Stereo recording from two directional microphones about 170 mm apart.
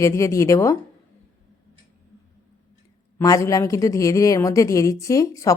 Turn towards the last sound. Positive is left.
turn(degrees=20)  # may be behind; listen again after turning